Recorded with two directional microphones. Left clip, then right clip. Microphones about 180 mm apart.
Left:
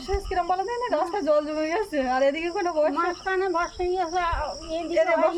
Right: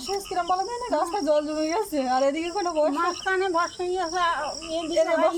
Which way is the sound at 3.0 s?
15° left (ahead or behind).